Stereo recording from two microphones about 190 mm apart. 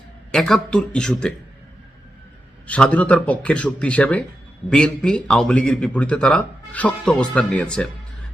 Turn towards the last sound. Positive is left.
turn(degrees=5)  # may be behind; listen again after turning